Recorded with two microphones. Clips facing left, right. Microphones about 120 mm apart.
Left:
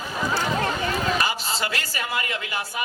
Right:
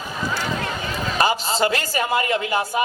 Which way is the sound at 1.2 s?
30° right (ahead or behind).